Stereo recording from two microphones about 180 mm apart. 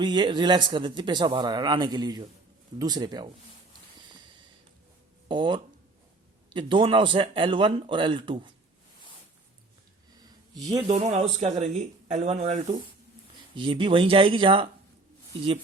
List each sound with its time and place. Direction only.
0.0 s speech: 25° right (ahead or behind)
5.3 s speech: 25° right (ahead or behind)
10.2 s a sound: 20° right (ahead or behind)
10.7 s speech: 35° right (ahead or behind)
13.6 s speech: 30° right (ahead or behind)